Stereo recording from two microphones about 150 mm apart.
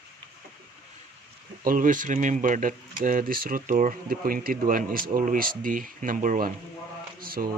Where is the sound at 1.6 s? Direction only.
65° right (ahead or behind).